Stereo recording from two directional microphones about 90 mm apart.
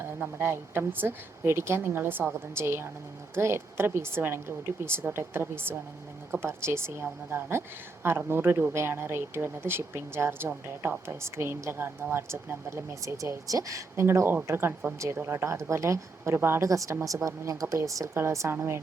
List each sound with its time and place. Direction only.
0.2 s a woman's voice: 25° right (ahead or behind)